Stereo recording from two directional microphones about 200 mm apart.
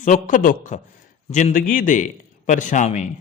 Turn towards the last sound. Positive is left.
turn(degrees=35)  # may be behind; listen again after turning